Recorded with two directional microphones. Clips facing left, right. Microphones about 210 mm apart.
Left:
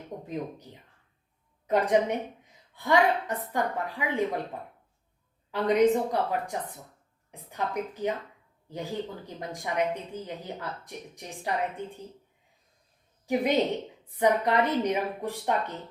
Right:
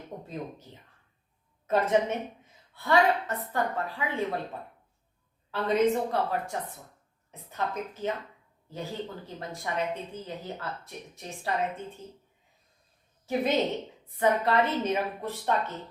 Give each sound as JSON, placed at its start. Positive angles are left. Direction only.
{"t": 0.3, "sound": "a woman's voice", "side_deg": 15}
{"t": 5.5, "sound": "a woman's voice", "side_deg": 15}
{"t": 13.2, "sound": "a woman's voice", "side_deg": 15}